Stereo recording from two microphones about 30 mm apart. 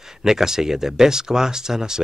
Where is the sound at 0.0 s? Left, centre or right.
Centre.